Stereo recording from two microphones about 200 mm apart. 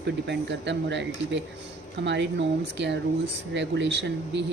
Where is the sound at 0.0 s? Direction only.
60° right (ahead or behind).